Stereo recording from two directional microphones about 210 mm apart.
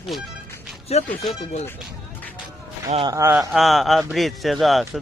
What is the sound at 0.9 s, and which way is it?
Speech, 30° left (ahead or behind).